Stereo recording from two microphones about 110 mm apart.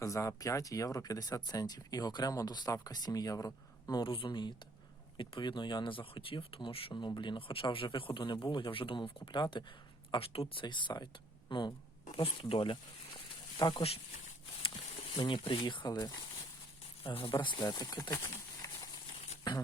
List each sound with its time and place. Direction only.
0.0 s speech: 30° left (ahead or behind)
4.0 s speech: 50° left (ahead or behind)
6.9 s speech: 40° left (ahead or behind)
10.1 s speech: 60° left (ahead or behind)
10.5 s speech: 45° left (ahead or behind)
12.1 s speech: 55° left (ahead or behind)
13.6 s speech: 40° left (ahead or behind)
15.1 s speech: 50° left (ahead or behind)
17.0 s speech: 55° left (ahead or behind)
17.4 s speech: 45° left (ahead or behind)
18.1 s a sound: 30° left (ahead or behind)